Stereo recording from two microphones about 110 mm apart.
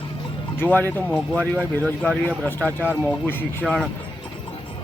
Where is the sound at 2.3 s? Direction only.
15° left (ahead or behind).